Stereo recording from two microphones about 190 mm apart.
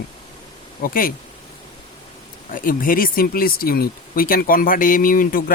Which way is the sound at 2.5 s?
45° left (ahead or behind).